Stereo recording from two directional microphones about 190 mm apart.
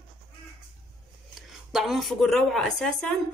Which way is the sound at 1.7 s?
Centre (ahead or behind).